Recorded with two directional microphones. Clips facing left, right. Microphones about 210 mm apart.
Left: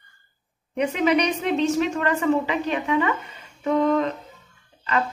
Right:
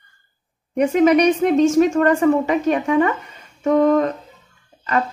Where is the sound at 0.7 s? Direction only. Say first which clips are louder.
Right 7 dB; 45° right (ahead or behind).